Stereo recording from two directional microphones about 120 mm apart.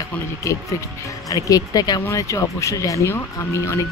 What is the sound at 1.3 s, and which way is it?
Speech, 30° left (ahead or behind).